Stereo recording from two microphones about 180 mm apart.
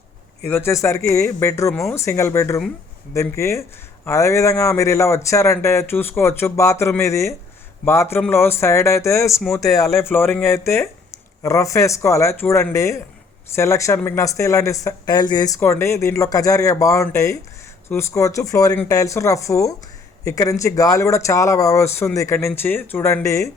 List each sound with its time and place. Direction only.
0.4 s speech: 10° left (ahead or behind)